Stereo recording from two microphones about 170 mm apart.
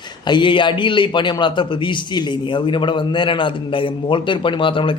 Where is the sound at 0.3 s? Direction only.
30° left (ahead or behind).